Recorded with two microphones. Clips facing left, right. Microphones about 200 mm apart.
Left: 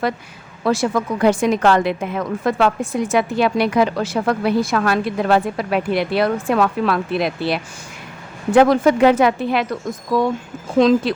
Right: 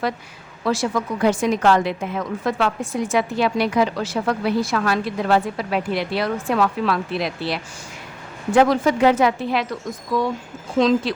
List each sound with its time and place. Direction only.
0.6 s a woman's voice: 55° left (ahead or behind)
10.8 s speech: 55° left (ahead or behind)